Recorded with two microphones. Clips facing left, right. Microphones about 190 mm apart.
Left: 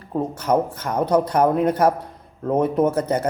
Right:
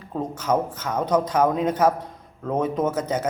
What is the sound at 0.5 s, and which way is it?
Speech, 15° left (ahead or behind).